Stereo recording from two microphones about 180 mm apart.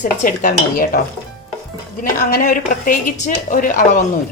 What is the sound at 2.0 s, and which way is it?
A woman's voice, 50° left (ahead or behind).